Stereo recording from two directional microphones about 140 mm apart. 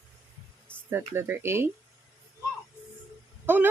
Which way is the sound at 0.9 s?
15° right (ahead or behind).